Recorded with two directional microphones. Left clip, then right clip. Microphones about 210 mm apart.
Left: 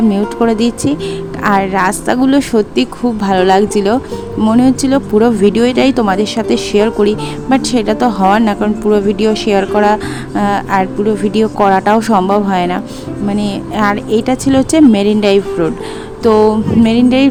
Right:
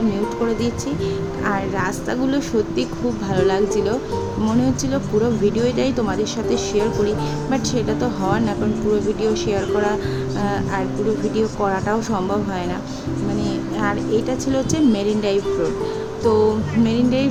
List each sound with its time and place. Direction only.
0.4 s speech: 45° left (ahead or behind)